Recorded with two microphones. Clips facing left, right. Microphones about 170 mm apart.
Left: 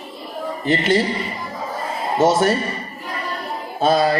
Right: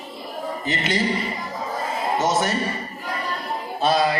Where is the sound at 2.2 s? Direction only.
55° left (ahead or behind).